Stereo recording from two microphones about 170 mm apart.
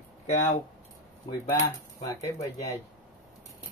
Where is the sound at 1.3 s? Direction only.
20° left (ahead or behind).